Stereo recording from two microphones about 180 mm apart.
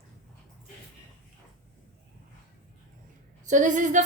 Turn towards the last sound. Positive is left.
turn(degrees=-45)  # may be behind; listen again after turning